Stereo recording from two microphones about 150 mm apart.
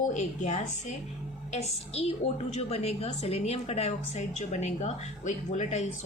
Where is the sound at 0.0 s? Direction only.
50° left (ahead or behind).